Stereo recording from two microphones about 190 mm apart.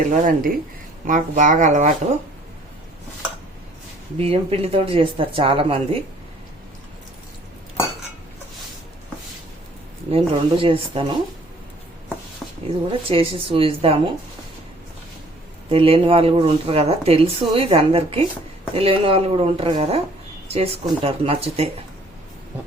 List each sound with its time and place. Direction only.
0.1 s speech: 45° right (ahead or behind)
4.2 s speech: 30° right (ahead or behind)
10.1 s speech: 30° right (ahead or behind)
13.1 s speech: 30° right (ahead or behind)
15.7 s speech: 30° right (ahead or behind)